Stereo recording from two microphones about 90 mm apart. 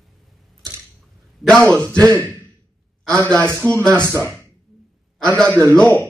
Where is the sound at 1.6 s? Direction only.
15° left (ahead or behind).